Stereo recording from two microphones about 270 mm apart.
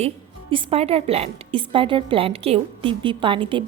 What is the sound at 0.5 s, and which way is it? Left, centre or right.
A woman's voice, right.